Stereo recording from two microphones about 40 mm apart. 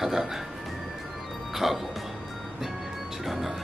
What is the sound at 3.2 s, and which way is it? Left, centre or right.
Music, centre.